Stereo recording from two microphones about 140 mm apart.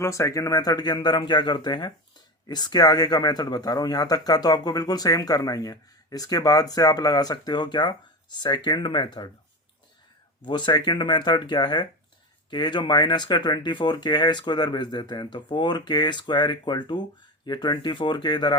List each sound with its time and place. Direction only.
0.0 s speech: 20° left (ahead or behind)
10.4 s speech: 35° left (ahead or behind)